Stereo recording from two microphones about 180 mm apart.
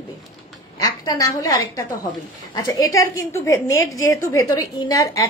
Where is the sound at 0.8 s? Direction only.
20° left (ahead or behind).